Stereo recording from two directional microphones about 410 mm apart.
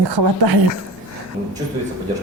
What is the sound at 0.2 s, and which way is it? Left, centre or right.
Speech, right.